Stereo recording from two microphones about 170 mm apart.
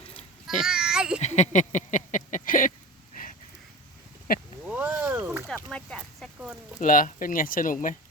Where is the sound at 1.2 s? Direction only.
45° left (ahead or behind).